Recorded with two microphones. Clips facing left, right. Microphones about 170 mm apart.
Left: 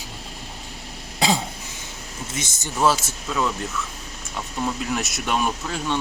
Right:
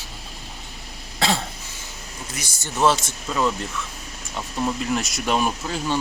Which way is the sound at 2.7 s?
5° left (ahead or behind).